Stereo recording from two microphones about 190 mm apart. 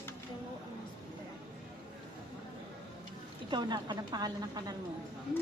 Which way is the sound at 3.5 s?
25° right (ahead or behind).